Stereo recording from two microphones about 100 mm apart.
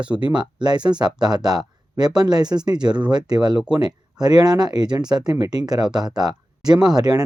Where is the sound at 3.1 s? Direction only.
45° right (ahead or behind).